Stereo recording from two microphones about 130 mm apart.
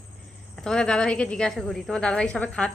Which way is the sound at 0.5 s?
5° left (ahead or behind).